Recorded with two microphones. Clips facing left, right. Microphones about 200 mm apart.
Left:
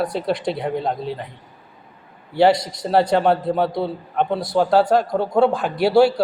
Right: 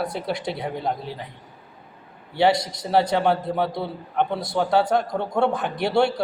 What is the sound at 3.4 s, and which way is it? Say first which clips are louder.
Speech: left 4 dB; 25° left (ahead or behind).